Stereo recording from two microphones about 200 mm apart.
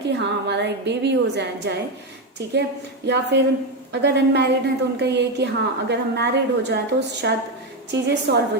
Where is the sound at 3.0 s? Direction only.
60° right (ahead or behind).